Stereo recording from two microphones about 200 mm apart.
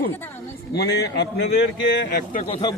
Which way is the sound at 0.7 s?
55° left (ahead or behind).